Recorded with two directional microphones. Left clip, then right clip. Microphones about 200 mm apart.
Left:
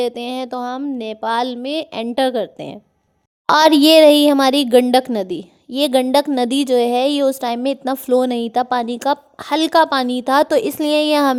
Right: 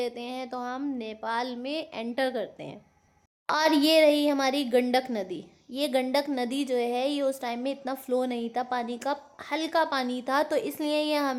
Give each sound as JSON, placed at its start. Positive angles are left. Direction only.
{"t": 0.0, "sound": "a woman's voice", "side_deg": 45}